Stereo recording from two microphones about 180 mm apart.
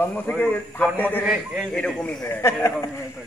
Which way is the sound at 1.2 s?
5° right (ahead or behind).